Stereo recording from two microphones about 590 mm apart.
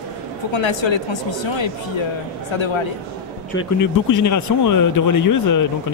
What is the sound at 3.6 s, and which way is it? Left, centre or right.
Speech, left.